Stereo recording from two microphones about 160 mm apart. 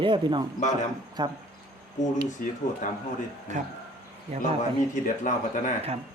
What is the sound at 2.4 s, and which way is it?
Speech, 55° left (ahead or behind).